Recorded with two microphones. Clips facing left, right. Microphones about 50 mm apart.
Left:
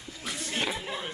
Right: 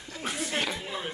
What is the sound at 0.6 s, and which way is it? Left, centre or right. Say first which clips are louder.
Speech: left 1 dB; centre.